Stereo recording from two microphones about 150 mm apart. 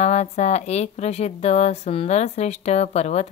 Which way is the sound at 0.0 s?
50° left (ahead or behind).